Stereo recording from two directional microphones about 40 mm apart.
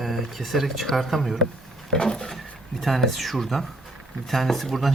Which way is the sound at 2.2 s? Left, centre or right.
Centre.